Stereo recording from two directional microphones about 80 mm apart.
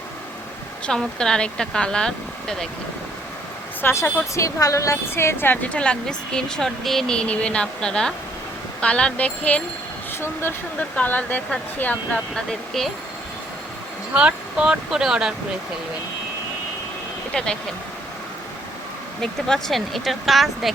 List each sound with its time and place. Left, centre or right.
0.9 s speech: centre
3.8 s a woman's voice: left
5.6 s speech: centre
10.8 s speech: left
12.3 s speech: centre
14.1 s speech: centre
17.3 s speech: centre
19.2 s speech: centre